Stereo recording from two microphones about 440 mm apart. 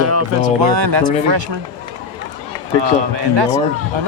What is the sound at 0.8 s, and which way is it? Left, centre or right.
Speech, right.